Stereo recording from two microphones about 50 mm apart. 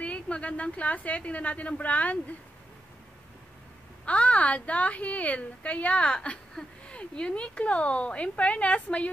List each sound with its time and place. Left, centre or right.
0.0 s a woman's voice: left
4.0 s a woman's voice: left